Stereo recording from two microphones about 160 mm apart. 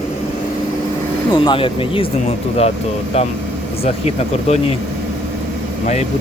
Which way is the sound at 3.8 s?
40° left (ahead or behind).